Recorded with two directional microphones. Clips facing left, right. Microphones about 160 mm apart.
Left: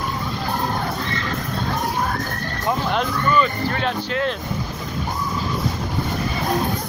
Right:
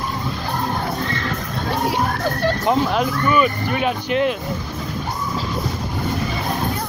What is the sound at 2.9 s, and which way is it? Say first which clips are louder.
Speech: right 2 dB; 10° right (ahead or behind).